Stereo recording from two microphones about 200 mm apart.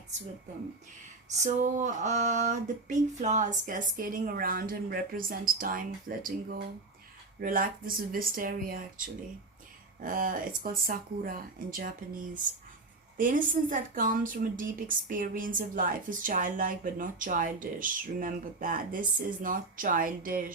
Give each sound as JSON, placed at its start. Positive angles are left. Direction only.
{"t": 1.3, "sound": "a sound", "side_deg": -40}
{"t": 7.3, "sound": "a woman's voice", "side_deg": -45}
{"t": 10.0, "sound": "a woman's voice", "side_deg": -45}
{"t": 13.1, "sound": "a woman's voice", "side_deg": -40}